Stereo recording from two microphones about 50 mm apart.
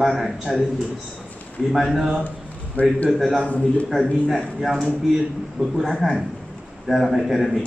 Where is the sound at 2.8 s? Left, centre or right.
Left.